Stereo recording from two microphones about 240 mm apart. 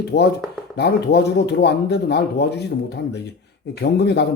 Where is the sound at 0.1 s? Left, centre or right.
Left.